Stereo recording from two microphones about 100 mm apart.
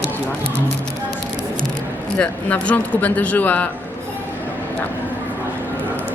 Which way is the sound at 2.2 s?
15° left (ahead or behind).